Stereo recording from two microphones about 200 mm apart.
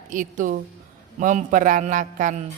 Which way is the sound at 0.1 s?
40° right (ahead or behind).